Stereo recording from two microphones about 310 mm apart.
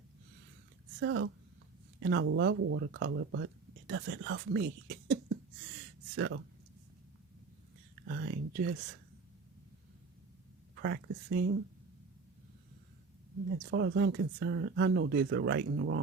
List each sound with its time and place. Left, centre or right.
0.9 s speech: right
8.0 s speech: right
10.8 s speech: right
13.6 s speech: right